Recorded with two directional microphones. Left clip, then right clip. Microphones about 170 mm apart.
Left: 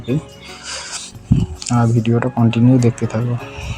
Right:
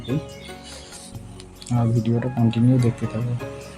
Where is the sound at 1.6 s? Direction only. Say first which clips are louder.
Left 6 dB; 20° left (ahead or behind).